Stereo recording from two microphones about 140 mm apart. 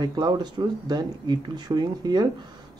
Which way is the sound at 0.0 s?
30° right (ahead or behind).